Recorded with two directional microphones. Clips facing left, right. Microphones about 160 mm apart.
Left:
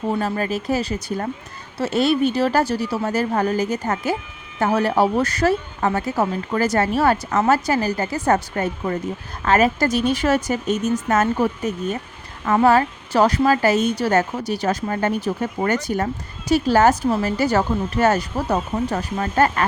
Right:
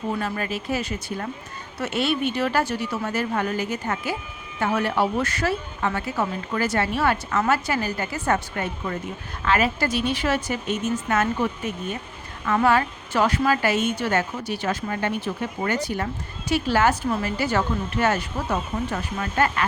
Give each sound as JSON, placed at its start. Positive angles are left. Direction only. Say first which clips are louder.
{"t": 0.1, "sound": "speech", "louder": "left 5 dB", "side_deg": 35}